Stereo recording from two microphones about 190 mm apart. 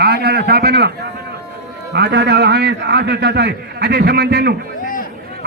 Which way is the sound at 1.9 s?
60° right (ahead or behind).